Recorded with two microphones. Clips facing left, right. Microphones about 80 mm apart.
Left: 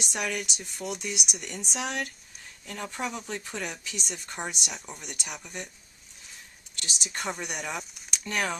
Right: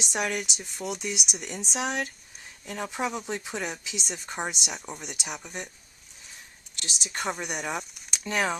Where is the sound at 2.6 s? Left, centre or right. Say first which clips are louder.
Right 3 dB; centre.